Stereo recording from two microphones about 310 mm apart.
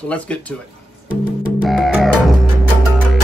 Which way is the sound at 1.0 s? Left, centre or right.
Centre.